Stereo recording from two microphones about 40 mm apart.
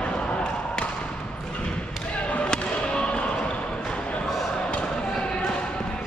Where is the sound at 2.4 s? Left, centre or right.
Left.